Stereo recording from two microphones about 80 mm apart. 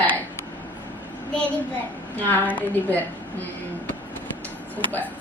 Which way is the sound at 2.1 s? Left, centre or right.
Left.